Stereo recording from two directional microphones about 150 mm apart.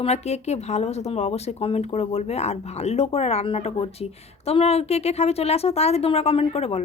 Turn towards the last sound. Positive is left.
turn(degrees=45)  # may be behind; listen again after turning